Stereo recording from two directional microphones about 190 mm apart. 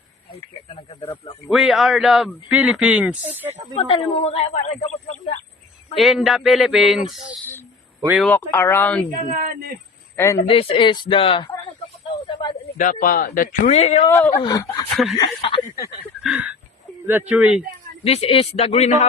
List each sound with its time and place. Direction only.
0.3 s speech: 30° left (ahead or behind)
1.5 s speech: centre (ahead or behind)
3.8 s speech: 30° left (ahead or behind)
6.0 s speech: centre (ahead or behind)
8.2 s speech: 10° left (ahead or behind)
10.2 s speech: 15° left (ahead or behind)
10.4 s speech: 30° left (ahead or behind)
12.3 s a sound: 25° left (ahead or behind)
12.7 s a man's voice: 45° left (ahead or behind)
14.1 s speech: 10° left (ahead or behind)
16.2 s a sound: 5° right (ahead or behind)
17.1 s speech: 10° right (ahead or behind)
18.0 s speech: 30° left (ahead or behind)